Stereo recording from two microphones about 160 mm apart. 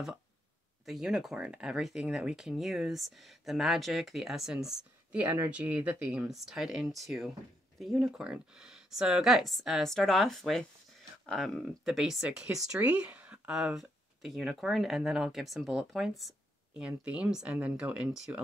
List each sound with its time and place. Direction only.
0.8 s speech: centre (ahead or behind)